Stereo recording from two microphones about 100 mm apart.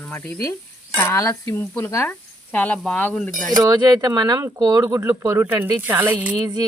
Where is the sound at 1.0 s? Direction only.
30° left (ahead or behind); by 3.3 s 15° left (ahead or behind).